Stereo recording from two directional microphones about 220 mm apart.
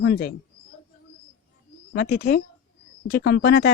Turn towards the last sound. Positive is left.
turn(degrees=45)  # may be behind; listen again after turning